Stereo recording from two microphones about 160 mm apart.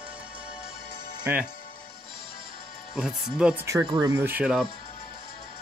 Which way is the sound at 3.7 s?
20° right (ahead or behind).